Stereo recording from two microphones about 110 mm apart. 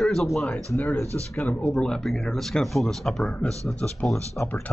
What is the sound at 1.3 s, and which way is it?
Speech, 15° left (ahead or behind).